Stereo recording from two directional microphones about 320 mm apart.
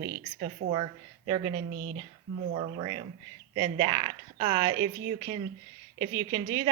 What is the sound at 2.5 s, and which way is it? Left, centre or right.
Speech, centre.